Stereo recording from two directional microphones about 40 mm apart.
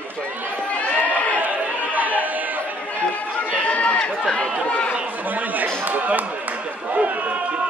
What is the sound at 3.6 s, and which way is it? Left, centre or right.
Chatter, left.